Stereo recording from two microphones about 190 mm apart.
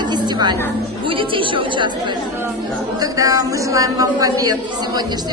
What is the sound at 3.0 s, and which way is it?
A woman's voice, 20° right (ahead or behind).